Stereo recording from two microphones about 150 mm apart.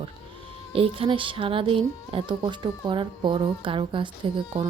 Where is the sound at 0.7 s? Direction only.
40° right (ahead or behind).